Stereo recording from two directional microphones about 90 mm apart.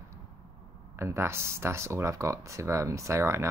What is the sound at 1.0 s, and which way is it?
Speech, 30° right (ahead or behind).